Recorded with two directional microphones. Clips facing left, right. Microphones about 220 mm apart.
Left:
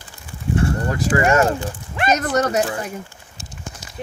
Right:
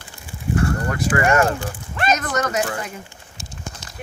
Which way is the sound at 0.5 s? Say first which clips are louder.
Left 1 dB; 25° left (ahead or behind).